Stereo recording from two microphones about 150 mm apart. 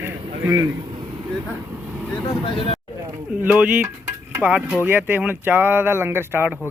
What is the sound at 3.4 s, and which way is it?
A man's voice, 10° right (ahead or behind).